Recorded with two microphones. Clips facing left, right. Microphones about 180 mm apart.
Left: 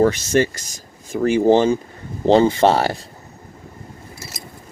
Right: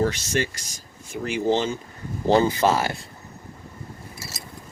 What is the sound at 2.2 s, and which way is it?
Speech, 20° left (ahead or behind).